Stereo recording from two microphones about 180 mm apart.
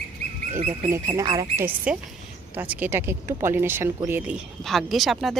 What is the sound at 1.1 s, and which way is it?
Speech, 20° right (ahead or behind).